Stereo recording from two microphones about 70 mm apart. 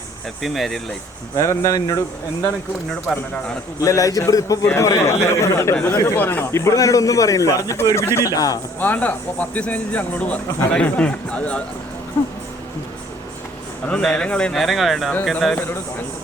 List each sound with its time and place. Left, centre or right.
0.4 s speech: centre
1.4 s a man's voice: left
3.1 s speech: centre
3.8 s a man's voice: left
5.0 s a man's voice: left
6.1 s a man's voice: left
8.2 s a man's voice: left
8.8 s speech: left
12.2 s speech: left
14.0 s speech: centre
14.5 s speech: centre